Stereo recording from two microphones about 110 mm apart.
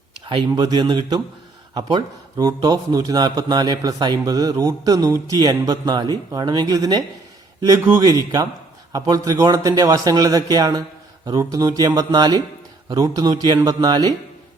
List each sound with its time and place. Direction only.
0.3 s a man's voice: 40° right (ahead or behind)